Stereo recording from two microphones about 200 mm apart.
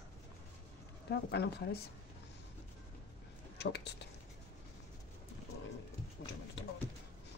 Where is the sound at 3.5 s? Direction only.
55° left (ahead or behind).